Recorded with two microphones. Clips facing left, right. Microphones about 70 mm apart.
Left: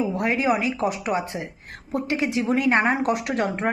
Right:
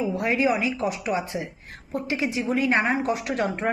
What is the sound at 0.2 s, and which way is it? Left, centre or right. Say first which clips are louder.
A woman's voice: even; left.